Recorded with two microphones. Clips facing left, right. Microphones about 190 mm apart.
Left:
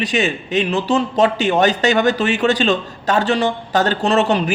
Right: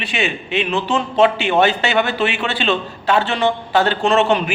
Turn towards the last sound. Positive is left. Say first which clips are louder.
# even
turn(degrees=40)  # may be behind; listen again after turning